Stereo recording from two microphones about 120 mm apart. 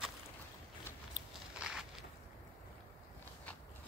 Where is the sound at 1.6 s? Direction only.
5° right (ahead or behind).